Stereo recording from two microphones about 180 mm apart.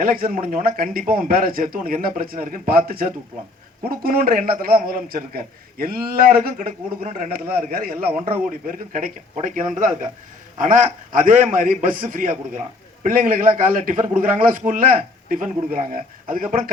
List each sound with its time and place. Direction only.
0.0 s a man's voice: 50° right (ahead or behind)